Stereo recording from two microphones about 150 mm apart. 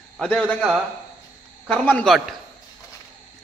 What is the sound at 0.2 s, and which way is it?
A man's voice, 5° left (ahead or behind).